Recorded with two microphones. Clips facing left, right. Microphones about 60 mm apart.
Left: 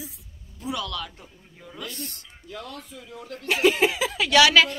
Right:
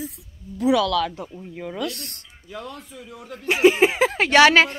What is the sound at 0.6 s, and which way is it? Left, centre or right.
Speech, right.